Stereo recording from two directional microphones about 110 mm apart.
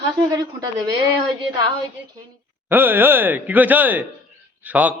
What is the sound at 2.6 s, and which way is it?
A man's voice, 20° right (ahead or behind).